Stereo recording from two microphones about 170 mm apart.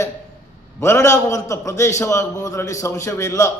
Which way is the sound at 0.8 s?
15° left (ahead or behind).